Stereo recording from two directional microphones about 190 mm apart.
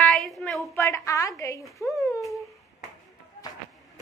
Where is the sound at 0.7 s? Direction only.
15° left (ahead or behind).